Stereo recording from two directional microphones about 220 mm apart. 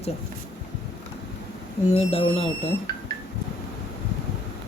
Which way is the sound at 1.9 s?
25° left (ahead or behind).